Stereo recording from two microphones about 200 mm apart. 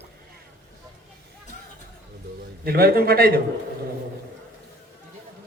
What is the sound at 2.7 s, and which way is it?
Speech, 50° right (ahead or behind).